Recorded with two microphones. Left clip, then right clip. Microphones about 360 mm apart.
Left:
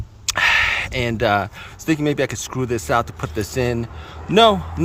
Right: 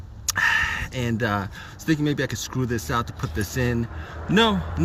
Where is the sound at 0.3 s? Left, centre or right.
Centre.